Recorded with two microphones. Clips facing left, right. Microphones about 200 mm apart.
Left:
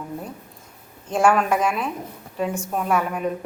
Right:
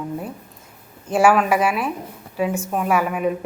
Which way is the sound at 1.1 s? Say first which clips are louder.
Right 3 dB; 5° right (ahead or behind).